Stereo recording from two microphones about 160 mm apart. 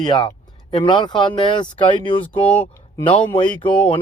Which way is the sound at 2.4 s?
10° left (ahead or behind).